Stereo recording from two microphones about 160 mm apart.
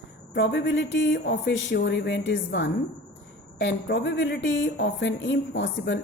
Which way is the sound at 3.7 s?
90° left.